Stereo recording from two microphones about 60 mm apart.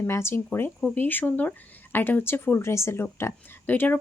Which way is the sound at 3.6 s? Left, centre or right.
Left.